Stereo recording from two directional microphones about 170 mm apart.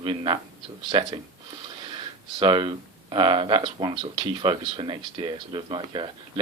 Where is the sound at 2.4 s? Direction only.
30° right (ahead or behind).